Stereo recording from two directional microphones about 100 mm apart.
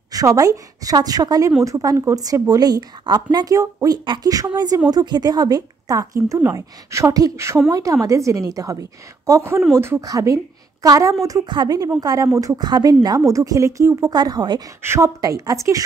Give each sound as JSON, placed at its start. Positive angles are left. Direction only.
{"t": 0.1, "sound": "speech", "side_deg": -35}
{"t": 4.0, "sound": "speech", "side_deg": -55}
{"t": 4.3, "sound": "a woman's voice", "side_deg": -40}
{"t": 11.4, "sound": "speech", "side_deg": -45}
{"t": 14.8, "sound": "a woman's voice", "side_deg": -25}